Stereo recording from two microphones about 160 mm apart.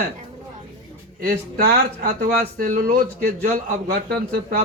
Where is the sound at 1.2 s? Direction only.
70° right (ahead or behind).